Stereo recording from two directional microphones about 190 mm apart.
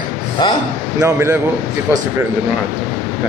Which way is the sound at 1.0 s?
10° right (ahead or behind).